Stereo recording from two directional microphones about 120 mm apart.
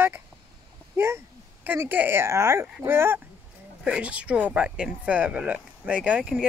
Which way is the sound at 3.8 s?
10° right (ahead or behind).